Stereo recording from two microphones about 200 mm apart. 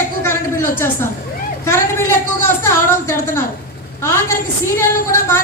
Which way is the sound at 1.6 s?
15° left (ahead or behind).